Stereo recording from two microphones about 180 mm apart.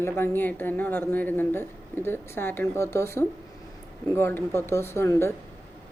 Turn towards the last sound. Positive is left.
turn(degrees=15)  # may be behind; listen again after turning